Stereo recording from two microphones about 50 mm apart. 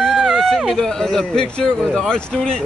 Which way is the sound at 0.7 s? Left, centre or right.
Centre.